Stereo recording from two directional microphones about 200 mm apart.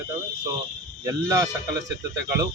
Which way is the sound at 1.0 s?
15° right (ahead or behind).